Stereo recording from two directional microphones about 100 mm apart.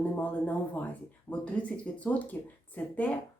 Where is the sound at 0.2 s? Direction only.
15° left (ahead or behind).